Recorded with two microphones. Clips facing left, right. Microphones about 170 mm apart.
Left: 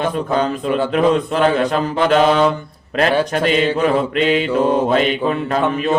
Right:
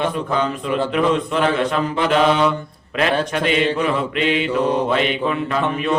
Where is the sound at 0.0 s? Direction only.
40° left (ahead or behind).